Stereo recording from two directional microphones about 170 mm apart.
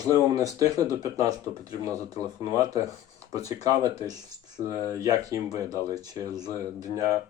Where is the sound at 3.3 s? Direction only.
20° right (ahead or behind).